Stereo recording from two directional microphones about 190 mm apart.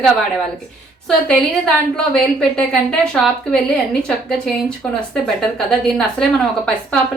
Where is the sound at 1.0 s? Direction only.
5° left (ahead or behind).